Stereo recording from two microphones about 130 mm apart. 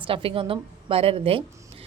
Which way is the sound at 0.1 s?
45° right (ahead or behind).